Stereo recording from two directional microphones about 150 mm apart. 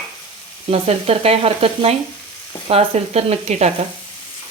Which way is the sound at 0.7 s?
45° right (ahead or behind).